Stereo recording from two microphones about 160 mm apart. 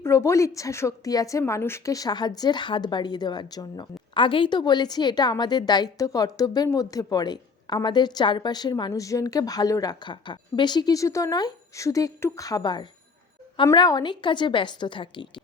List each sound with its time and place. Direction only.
0.0 s a woman's voice: 15° left (ahead or behind)